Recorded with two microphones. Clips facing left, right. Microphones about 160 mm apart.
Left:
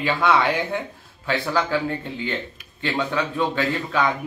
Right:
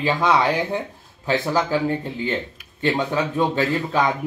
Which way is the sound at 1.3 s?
15° right (ahead or behind).